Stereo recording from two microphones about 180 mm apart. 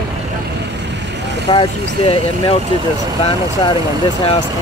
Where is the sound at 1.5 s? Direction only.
30° left (ahead or behind).